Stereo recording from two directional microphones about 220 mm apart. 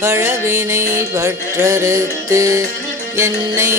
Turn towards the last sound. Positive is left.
turn(degrees=-15)  # may be behind; listen again after turning